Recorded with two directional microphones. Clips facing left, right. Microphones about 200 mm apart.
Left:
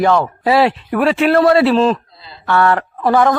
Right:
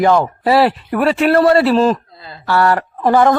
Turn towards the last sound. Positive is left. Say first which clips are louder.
# right 1 dB
turn(degrees=-20)  # may be behind; listen again after turning